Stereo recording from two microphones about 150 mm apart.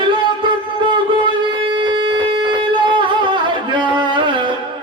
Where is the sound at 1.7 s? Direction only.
30° right (ahead or behind).